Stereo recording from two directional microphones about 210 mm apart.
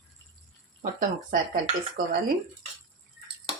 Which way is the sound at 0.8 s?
40° right (ahead or behind).